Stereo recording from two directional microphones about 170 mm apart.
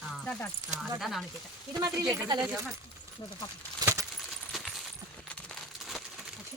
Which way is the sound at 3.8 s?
20° right (ahead or behind).